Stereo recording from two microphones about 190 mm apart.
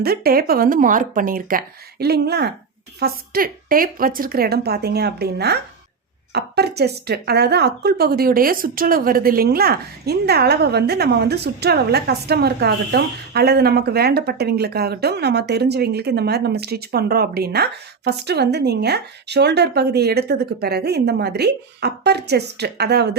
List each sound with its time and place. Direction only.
0.0 s a woman's voice: 55° right (ahead or behind)